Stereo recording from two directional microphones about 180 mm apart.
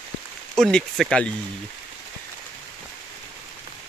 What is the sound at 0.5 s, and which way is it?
Speech, centre (ahead or behind).